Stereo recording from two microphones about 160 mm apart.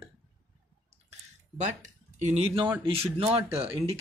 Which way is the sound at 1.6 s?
50° right (ahead or behind).